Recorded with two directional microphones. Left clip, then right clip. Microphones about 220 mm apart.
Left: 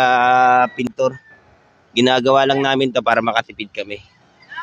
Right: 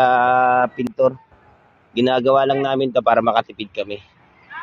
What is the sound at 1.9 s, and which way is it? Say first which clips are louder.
Speech: left 2 dB; 20° left (ahead or behind).